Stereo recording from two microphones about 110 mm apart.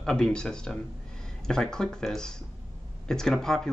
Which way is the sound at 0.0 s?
5° left (ahead or behind).